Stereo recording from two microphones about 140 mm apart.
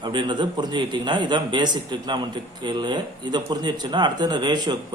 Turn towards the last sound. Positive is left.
turn(degrees=-30)  # may be behind; listen again after turning